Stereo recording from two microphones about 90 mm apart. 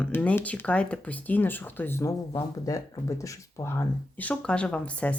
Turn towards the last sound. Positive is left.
turn(degrees=15)  # may be behind; listen again after turning